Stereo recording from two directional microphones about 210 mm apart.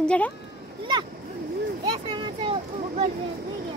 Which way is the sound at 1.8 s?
25° right (ahead or behind).